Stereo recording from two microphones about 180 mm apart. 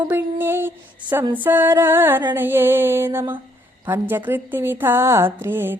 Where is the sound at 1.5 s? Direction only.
10° right (ahead or behind).